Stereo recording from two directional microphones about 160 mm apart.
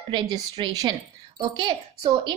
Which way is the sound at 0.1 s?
30° right (ahead or behind).